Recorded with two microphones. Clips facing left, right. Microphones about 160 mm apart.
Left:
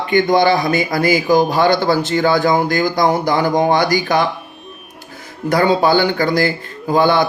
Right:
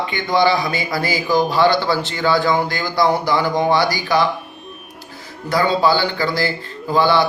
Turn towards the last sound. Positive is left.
turn(degrees=50)  # may be behind; listen again after turning